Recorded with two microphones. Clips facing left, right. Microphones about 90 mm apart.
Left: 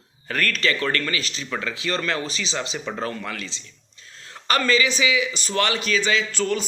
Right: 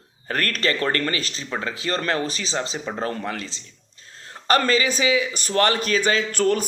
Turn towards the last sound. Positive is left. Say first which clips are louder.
# right 3 dB
turn(degrees=-45)  # may be behind; listen again after turning